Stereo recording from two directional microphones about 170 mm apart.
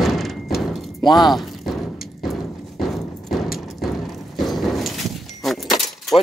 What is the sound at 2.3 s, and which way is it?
Clip-clop, centre (ahead or behind).